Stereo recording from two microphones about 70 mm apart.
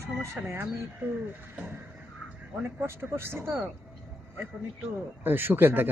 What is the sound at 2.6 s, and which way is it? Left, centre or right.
Speech, right.